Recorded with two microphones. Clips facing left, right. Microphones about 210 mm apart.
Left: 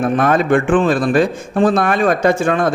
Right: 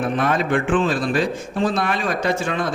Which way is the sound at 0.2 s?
50° left (ahead or behind).